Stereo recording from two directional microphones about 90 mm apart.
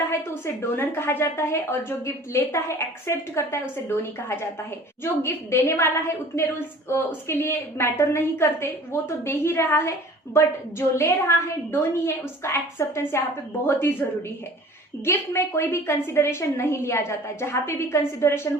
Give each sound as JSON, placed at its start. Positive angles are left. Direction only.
{"t": 0.1, "sound": "a woman's voice", "side_deg": 25}
{"t": 15.0, "sound": "a woman's voice", "side_deg": 30}